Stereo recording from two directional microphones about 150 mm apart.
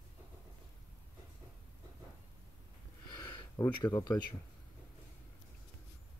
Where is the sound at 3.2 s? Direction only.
20° left (ahead or behind).